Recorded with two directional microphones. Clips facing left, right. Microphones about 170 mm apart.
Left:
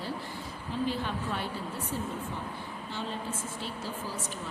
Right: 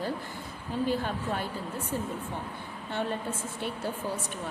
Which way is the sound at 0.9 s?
45° right (ahead or behind).